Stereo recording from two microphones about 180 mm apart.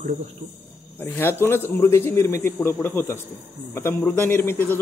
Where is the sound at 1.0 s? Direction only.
10° left (ahead or behind).